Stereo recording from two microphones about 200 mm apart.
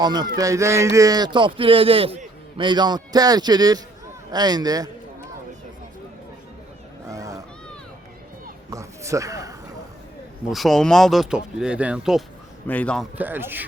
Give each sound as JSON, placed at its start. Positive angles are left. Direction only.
{"t": 0.0, "sound": "speech", "side_deg": -20}
{"t": 7.1, "sound": "vehicle", "side_deg": -15}
{"t": 8.7, "sound": "a sound", "side_deg": -15}
{"t": 10.5, "sound": "speech", "side_deg": 0}
{"t": 12.6, "sound": "a man's voice", "side_deg": 5}
{"t": 13.1, "sound": "speech", "side_deg": -10}